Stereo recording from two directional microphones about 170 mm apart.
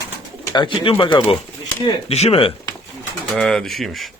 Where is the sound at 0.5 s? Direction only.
30° left (ahead or behind).